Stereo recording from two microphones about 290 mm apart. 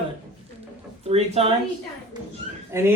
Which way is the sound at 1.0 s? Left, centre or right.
Right.